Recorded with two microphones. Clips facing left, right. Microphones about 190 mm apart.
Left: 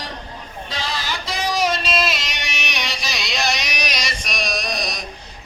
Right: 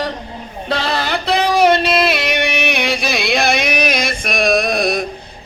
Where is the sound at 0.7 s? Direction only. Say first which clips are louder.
Right 9 dB; 60° right (ahead or behind).